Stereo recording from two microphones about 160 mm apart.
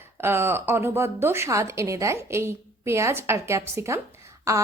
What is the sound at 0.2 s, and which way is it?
A woman's voice, 15° right (ahead or behind).